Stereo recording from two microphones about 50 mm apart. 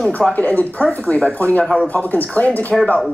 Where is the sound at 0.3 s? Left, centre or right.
Left.